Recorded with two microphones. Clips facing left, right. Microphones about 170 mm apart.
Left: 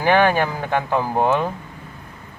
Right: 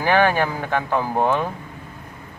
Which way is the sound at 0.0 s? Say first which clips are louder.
Left 1 dB; 15° left (ahead or behind).